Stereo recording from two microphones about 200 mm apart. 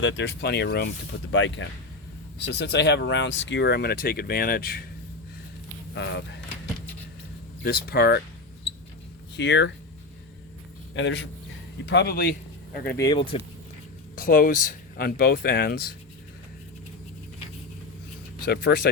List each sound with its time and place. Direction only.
0.0 s speech: 65° left (ahead or behind)
1.3 s speech: 65° left (ahead or behind); by 4.9 s 45° left (ahead or behind)
5.9 s speech: 60° left (ahead or behind)
7.6 s speech: 50° left (ahead or behind)
9.3 s speech: 60° left (ahead or behind)
10.9 s speech: 65° left (ahead or behind)
13.0 s speech: 20° left (ahead or behind)
14.2 s speech: 45° left (ahead or behind)
18.4 s speech: 50° left (ahead or behind)